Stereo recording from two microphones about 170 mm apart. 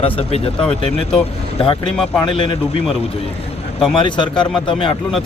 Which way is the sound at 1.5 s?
30° left (ahead or behind).